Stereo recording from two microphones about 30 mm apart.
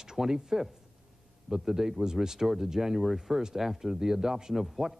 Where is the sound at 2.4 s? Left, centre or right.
Centre.